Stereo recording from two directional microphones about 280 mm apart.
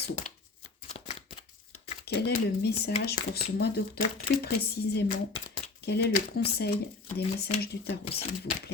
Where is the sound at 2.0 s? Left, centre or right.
Left.